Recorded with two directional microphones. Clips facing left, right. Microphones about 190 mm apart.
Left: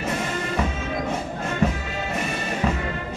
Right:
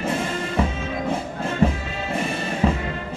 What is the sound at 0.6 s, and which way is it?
Music, 30° right (ahead or behind).